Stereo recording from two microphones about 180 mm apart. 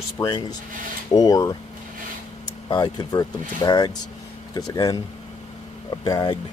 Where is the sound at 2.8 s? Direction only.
25° left (ahead or behind).